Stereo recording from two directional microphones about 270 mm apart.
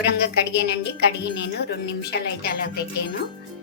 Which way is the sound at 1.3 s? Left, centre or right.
Left.